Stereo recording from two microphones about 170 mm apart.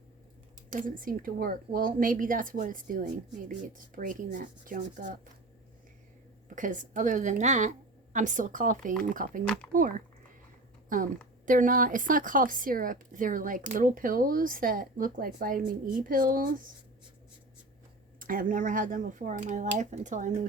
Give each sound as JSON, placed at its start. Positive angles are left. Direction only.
{"t": 0.7, "sound": "speech", "side_deg": -50}
{"t": 6.6, "sound": "speech", "side_deg": -50}
{"t": 18.2, "sound": "speech", "side_deg": -55}